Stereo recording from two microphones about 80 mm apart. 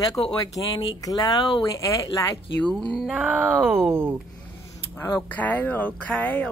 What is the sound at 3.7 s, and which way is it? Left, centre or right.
Speech, right.